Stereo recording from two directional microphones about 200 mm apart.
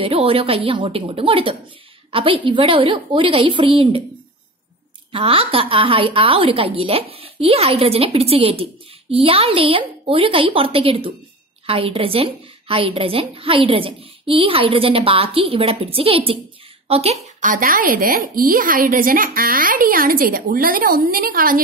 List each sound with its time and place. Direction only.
0.0 s a woman's voice: 30° right (ahead or behind)
5.1 s a woman's voice: 25° right (ahead or behind); by 21.5 s 45° right (ahead or behind)